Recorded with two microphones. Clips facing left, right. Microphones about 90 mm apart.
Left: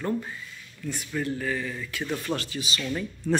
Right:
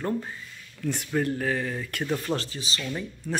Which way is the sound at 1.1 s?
55° right (ahead or behind).